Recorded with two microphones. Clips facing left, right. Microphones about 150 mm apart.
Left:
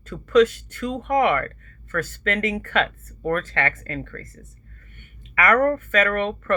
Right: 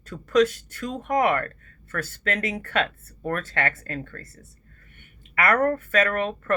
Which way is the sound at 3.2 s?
45° right (ahead or behind).